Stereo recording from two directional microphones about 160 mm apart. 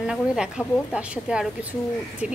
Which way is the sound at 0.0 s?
5° right (ahead or behind).